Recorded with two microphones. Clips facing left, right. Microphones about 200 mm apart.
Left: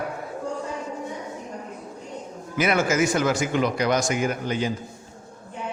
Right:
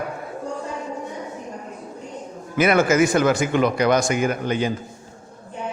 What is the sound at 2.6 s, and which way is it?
Speech, 60° right (ahead or behind).